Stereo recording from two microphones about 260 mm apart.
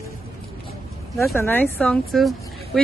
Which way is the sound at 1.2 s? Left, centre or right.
Centre.